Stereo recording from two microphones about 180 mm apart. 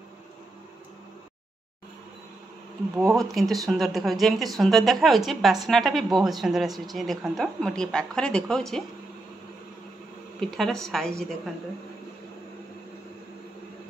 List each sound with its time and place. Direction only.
3.2 s a woman's voice: centre (ahead or behind)
10.4 s a woman's voice: 5° left (ahead or behind)